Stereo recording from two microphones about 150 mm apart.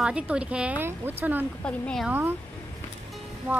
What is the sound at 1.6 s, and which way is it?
Speech, 5° left (ahead or behind).